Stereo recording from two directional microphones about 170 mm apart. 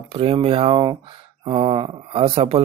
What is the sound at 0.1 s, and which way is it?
Speech, 35° right (ahead or behind).